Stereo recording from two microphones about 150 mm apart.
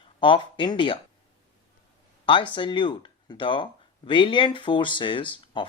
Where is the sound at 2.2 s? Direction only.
35° left (ahead or behind).